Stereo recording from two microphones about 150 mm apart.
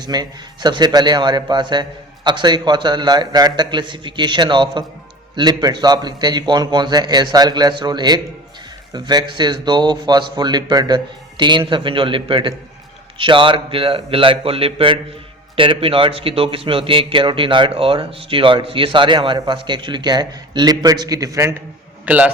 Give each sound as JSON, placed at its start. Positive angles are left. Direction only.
{"t": 0.0, "sound": "a man's voice", "side_deg": -25}
{"t": 22.0, "sound": "a man's voice", "side_deg": -10}